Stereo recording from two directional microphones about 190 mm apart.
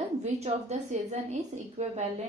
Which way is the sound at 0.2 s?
35° right (ahead or behind).